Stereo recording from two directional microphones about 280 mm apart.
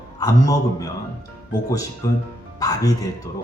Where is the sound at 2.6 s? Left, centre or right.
Centre.